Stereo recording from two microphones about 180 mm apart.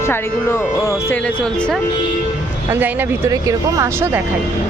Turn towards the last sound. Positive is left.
turn(degrees=-15)  # may be behind; listen again after turning